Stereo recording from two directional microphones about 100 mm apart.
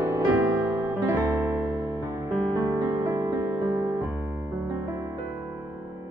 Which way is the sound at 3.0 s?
35° right (ahead or behind).